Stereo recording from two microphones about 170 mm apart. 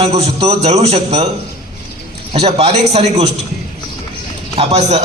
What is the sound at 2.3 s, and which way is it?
A man's voice, 35° right (ahead or behind).